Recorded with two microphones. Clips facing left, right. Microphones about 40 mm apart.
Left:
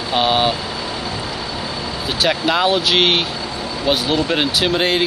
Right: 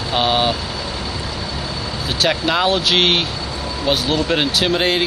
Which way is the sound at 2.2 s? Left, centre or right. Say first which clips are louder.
Left 1 dB; centre.